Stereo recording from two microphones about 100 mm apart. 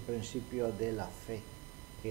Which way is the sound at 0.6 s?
20° right (ahead or behind).